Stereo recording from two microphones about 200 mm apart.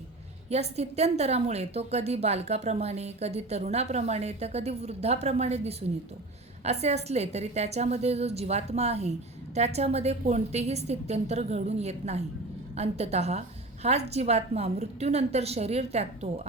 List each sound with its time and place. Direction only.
0.5 s a woman's voice: 30° right (ahead or behind)